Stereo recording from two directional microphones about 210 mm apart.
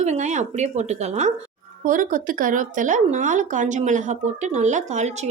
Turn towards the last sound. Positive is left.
turn(degrees=-35)  # may be behind; listen again after turning